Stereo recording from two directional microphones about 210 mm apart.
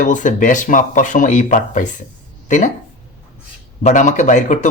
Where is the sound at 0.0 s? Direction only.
35° left (ahead or behind).